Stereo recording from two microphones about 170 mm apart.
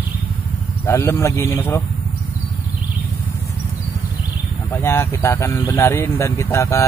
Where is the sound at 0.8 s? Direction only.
15° left (ahead or behind).